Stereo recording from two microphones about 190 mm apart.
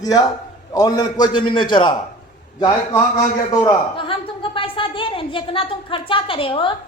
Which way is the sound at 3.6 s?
25° left (ahead or behind).